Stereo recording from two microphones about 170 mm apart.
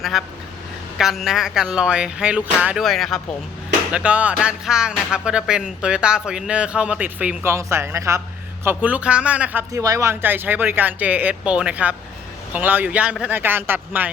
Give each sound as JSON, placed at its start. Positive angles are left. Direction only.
{"t": 0.0, "sound": "music", "side_deg": 0}
{"t": 8.6, "sound": "speech", "side_deg": -10}